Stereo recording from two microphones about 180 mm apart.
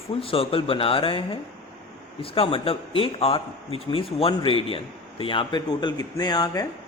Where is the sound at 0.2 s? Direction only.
30° left (ahead or behind).